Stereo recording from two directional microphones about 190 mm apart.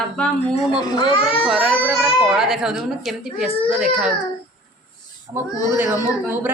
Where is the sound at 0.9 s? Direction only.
20° left (ahead or behind).